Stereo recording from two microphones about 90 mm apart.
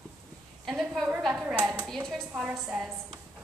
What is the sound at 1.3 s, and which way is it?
Speech, 10° right (ahead or behind).